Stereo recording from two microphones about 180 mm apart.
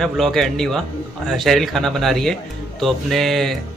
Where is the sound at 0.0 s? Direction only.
Centre (ahead or behind).